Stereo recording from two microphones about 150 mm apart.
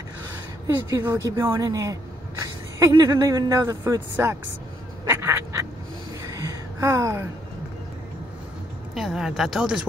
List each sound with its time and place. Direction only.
0.8 s a woman's voice: 20° right (ahead or behind)
5.0 s duck: 15° right (ahead or behind)
6.2 s a sound: 20° right (ahead or behind)
8.9 s speech: centre (ahead or behind)